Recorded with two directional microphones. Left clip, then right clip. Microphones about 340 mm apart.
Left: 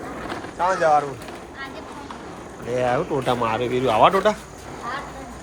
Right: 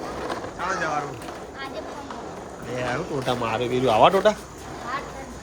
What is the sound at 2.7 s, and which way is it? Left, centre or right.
Speech, centre.